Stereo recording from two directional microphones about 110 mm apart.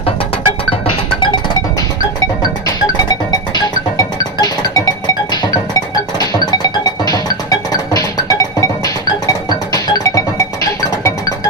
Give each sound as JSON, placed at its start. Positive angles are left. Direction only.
{"t": 3.3, "sound": "music", "side_deg": 35}